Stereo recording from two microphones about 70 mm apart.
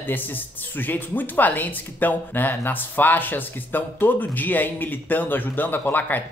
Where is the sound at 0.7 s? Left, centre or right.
Left.